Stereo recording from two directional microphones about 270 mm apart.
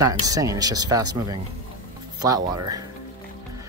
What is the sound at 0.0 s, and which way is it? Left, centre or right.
Speech, centre.